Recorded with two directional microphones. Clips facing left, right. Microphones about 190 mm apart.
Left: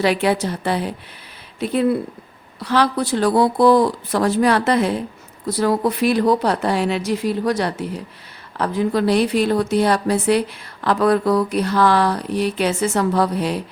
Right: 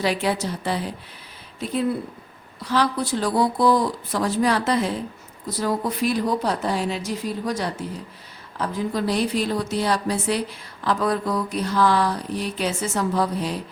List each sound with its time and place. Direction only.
0.0 s speech: 65° left (ahead or behind)